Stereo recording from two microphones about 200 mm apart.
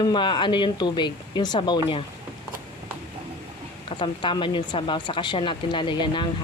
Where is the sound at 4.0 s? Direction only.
25° left (ahead or behind).